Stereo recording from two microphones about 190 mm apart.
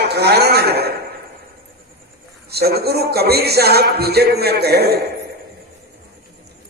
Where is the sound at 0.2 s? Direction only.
55° right (ahead or behind).